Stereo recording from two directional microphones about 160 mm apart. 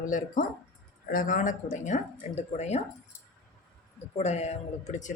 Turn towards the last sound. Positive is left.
turn(degrees=45)  # may be behind; listen again after turning